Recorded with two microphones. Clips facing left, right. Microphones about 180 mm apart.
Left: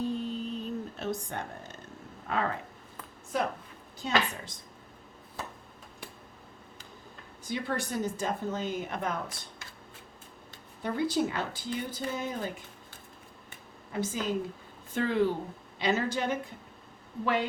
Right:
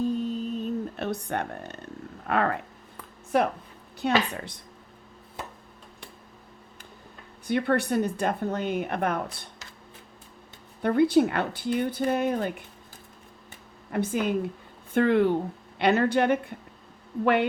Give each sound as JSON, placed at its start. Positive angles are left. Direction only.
{"t": 0.0, "sound": "a sound", "side_deg": -45}
{"t": 2.2, "sound": "a woman's voice", "side_deg": -65}
{"t": 7.4, "sound": "a woman's voice", "side_deg": -60}
{"t": 10.8, "sound": "a woman's voice", "side_deg": -60}
{"t": 13.9, "sound": "a woman's voice", "side_deg": -60}